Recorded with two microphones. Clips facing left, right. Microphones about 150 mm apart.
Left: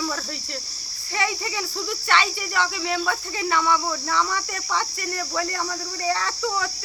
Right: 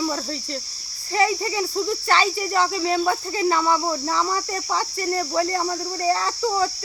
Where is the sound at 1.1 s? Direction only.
35° right (ahead or behind).